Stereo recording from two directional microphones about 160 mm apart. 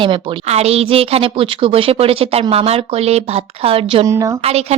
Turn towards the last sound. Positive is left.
turn(degrees=-40)  # may be behind; listen again after turning